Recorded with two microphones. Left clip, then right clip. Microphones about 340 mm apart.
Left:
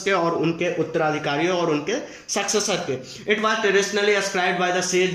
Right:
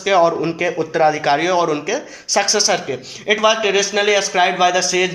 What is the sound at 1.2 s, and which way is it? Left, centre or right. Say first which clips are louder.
A man's voice: right 7 dB; centre.